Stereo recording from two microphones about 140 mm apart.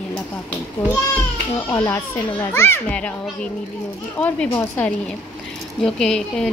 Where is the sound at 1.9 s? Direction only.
15° left (ahead or behind).